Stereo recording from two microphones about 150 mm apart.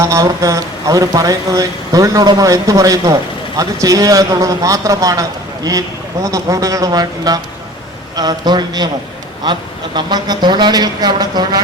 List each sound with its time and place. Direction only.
0.0 s speech: 20° right (ahead or behind)
6.2 s speech: 25° right (ahead or behind)